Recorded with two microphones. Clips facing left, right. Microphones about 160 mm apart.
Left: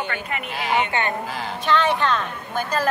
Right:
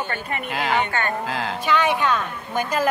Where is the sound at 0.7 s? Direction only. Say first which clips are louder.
Left 2 dB; 20° left (ahead or behind).